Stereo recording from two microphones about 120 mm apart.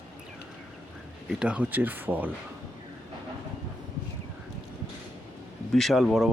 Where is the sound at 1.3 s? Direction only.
5° right (ahead or behind).